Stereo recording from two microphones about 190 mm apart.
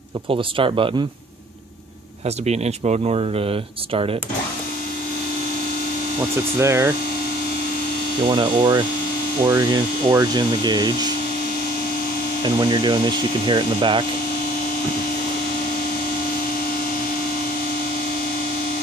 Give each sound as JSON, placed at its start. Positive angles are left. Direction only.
{"t": 0.3, "sound": "speech", "side_deg": -25}
{"t": 2.5, "sound": "speech", "side_deg": -35}
{"t": 6.6, "sound": "hum", "side_deg": -15}
{"t": 8.3, "sound": "speech", "side_deg": -25}
{"t": 9.4, "sound": "hum", "side_deg": -15}
{"t": 10.1, "sound": "speech", "side_deg": -25}
{"t": 12.4, "sound": "speech", "side_deg": -25}